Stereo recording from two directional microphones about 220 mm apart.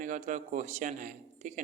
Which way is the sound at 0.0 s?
35° right (ahead or behind).